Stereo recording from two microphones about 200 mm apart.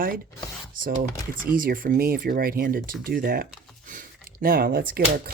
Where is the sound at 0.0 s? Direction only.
45° right (ahead or behind).